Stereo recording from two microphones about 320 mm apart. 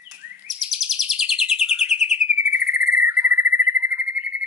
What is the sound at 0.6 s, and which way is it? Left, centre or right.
Chirp, centre.